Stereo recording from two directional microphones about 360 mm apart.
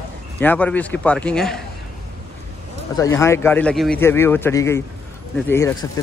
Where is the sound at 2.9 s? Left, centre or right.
Centre.